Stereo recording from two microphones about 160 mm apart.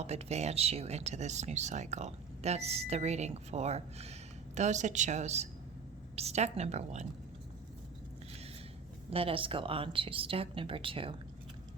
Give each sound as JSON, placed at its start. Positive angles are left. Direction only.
{"t": 0.0, "sound": "speech", "side_deg": -40}
{"t": 9.0, "sound": "speech", "side_deg": -35}